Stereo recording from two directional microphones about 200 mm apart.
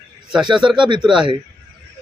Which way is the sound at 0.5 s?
5° right (ahead or behind).